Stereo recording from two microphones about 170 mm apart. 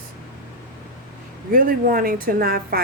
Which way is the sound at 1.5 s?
55° right (ahead or behind).